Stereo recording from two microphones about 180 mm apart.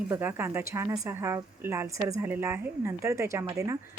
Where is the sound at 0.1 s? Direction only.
10° right (ahead or behind).